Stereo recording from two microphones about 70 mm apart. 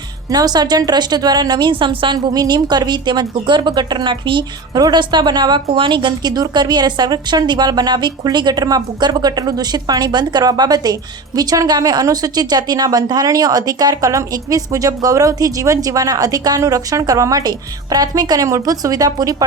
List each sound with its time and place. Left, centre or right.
0.3 s a woman's voice: right
13.2 s speech: right